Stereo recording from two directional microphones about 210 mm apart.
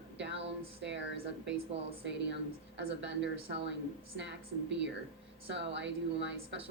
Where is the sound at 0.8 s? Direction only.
55° right (ahead or behind).